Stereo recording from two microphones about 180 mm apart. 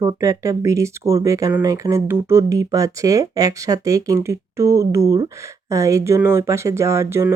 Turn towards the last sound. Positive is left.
turn(degrees=-15)  # may be behind; listen again after turning